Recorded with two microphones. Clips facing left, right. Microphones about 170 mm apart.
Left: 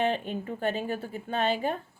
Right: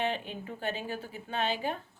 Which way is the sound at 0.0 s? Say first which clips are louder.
Left 5 dB; 50° left (ahead or behind).